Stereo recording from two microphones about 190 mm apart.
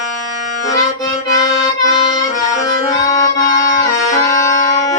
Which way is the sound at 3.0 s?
20° left (ahead or behind).